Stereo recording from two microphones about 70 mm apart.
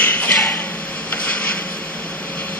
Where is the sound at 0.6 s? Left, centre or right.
Left.